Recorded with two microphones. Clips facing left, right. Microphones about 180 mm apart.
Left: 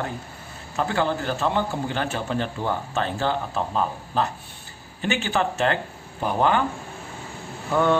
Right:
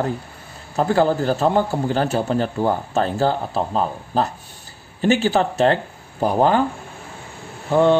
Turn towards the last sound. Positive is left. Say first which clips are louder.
# right 5 dB
turn(degrees=-30)  # may be behind; listen again after turning